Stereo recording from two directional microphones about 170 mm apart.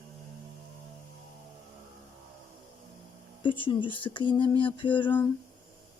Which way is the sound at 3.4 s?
30° left (ahead or behind).